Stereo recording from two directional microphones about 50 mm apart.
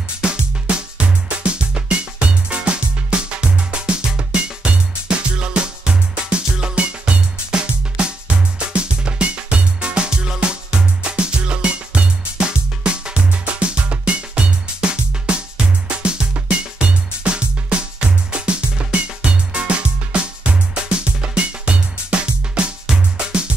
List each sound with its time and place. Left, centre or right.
0.2 s music: right